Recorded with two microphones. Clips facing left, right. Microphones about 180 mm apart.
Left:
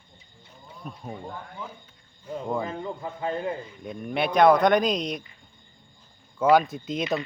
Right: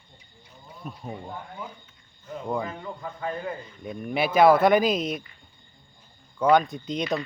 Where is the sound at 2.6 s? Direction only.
25° left (ahead or behind).